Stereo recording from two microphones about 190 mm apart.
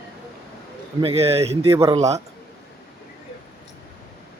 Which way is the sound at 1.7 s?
15° right (ahead or behind).